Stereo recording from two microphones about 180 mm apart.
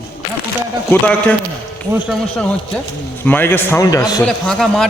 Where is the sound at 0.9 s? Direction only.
10° left (ahead or behind).